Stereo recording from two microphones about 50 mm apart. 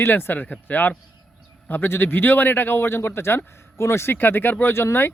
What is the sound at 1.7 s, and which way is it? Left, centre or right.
A man's voice, left.